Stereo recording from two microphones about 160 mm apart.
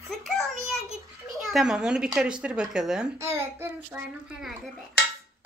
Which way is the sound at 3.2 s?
15° right (ahead or behind).